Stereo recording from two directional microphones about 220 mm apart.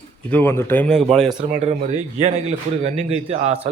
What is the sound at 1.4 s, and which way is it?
Speech, 35° right (ahead or behind).